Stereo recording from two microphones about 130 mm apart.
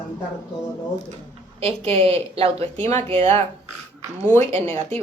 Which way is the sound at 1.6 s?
45° right (ahead or behind).